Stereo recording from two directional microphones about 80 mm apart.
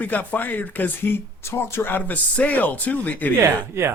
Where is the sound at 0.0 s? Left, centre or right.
Centre.